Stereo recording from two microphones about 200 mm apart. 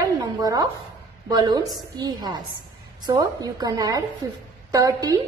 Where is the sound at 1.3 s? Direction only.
20° right (ahead or behind).